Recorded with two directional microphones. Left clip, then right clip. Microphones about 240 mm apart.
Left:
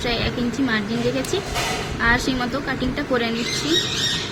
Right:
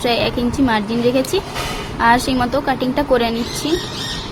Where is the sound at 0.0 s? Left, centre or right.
Centre.